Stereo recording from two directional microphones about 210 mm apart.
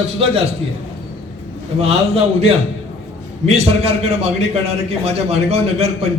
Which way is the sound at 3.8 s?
30° right (ahead or behind).